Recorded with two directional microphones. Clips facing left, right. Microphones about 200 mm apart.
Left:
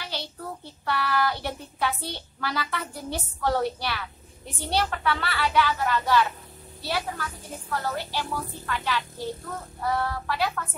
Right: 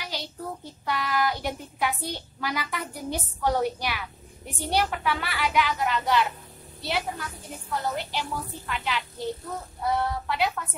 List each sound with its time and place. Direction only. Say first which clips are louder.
0.0 s child singing: even; 15° right (ahead or behind)
0.8 s speech: left 1 dB; 15° right (ahead or behind)